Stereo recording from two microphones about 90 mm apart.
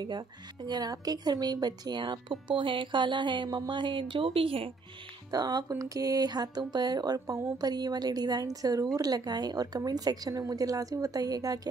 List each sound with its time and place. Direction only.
0.7 s speech: 50° right (ahead or behind); by 4.6 s 90° right
5.3 s a woman's voice: 45° right (ahead or behind)